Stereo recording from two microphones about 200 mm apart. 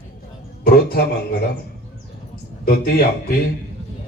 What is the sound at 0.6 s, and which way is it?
Speech, 50° left (ahead or behind).